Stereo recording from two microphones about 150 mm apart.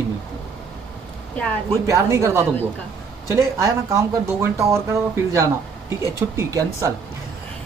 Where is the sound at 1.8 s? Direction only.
20° right (ahead or behind).